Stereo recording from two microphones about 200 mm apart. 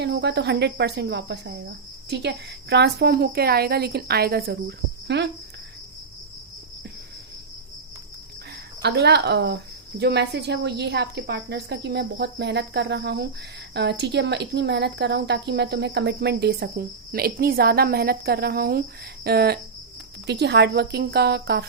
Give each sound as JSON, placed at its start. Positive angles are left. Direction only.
{"t": 0.0, "sound": "a woman's voice", "side_deg": -55}
{"t": 8.8, "sound": "a woman's voice", "side_deg": -55}